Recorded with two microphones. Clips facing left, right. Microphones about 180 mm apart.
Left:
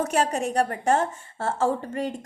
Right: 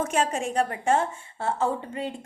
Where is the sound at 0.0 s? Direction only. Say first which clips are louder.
Left 2 dB; 40° left (ahead or behind).